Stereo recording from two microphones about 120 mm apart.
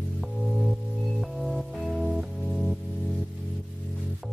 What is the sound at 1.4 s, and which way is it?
Music, centre (ahead or behind).